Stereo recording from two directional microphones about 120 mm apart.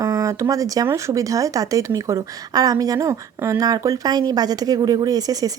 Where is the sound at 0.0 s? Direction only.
25° right (ahead or behind).